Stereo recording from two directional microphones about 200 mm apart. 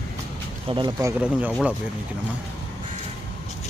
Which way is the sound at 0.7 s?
20° right (ahead or behind).